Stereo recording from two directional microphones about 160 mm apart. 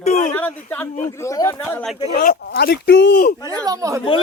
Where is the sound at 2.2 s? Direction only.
70° left (ahead or behind).